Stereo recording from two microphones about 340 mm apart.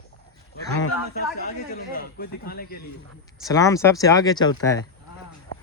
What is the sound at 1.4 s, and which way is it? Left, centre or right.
Speech, left.